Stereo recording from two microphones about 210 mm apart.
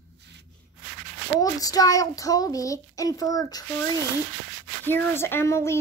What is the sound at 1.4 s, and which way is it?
A child's voice, 15° left (ahead or behind).